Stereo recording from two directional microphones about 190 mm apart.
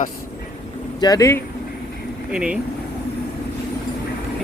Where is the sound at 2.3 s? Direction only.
5° right (ahead or behind).